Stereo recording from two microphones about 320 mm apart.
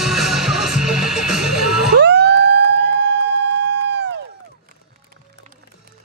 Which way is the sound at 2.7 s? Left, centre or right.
Left.